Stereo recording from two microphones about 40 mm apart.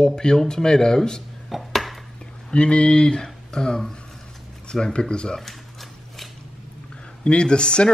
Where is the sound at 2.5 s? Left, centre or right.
Left.